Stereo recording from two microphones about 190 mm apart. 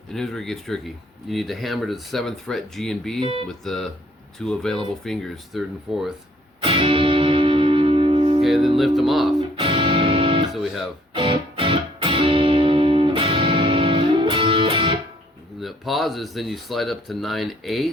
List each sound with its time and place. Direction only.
0.1 s speech: centre (ahead or behind)
6.6 s music: 30° right (ahead or behind)
8.4 s speech: centre (ahead or behind)
9.6 s music: 30° right (ahead or behind)
10.5 s music: centre (ahead or behind)
11.1 s music: 25° right (ahead or behind)
15.6 s speech: centre (ahead or behind)